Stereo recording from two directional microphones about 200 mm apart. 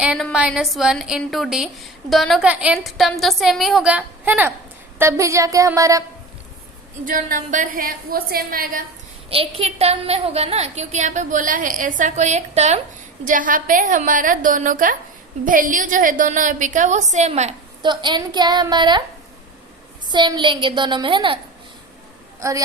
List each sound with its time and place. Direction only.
0.0 s a woman's voice: 5° right (ahead or behind)
7.0 s a woman's voice: 45° right (ahead or behind)
9.3 s a woman's voice: 30° right (ahead or behind)
17.8 s a woman's voice: 20° right (ahead or behind)
20.1 s a woman's voice: 20° right (ahead or behind)
22.4 s a woman's voice: 15° right (ahead or behind)